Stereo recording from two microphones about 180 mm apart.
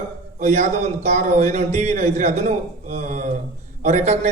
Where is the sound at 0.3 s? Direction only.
40° right (ahead or behind).